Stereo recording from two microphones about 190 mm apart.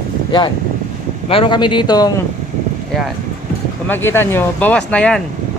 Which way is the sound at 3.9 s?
10° left (ahead or behind).